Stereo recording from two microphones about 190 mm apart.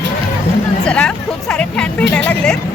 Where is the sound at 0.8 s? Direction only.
5° left (ahead or behind).